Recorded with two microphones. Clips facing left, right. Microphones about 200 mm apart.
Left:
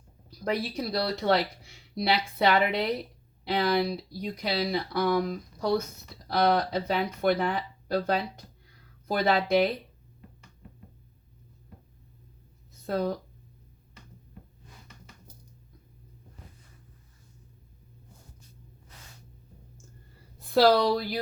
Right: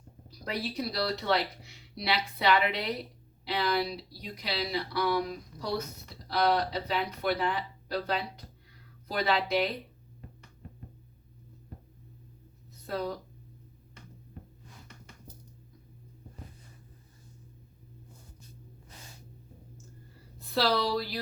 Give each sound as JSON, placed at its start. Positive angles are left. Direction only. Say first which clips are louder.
{"t": 0.9, "sound": "speech", "louder": "left 5 dB", "side_deg": 50}
{"t": 12.9, "sound": "speech", "louder": "left 5 dB", "side_deg": 50}
{"t": 20.5, "sound": "speech", "louder": "left 7 dB", "side_deg": 50}